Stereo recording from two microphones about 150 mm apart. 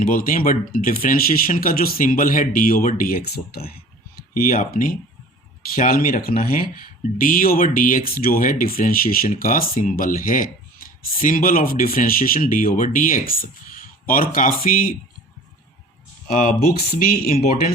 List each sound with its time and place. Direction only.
0.0 s speech: 65° left (ahead or behind); by 3.8 s 90° left
4.4 s speech: 75° left (ahead or behind)
16.2 s speech: 60° left (ahead or behind)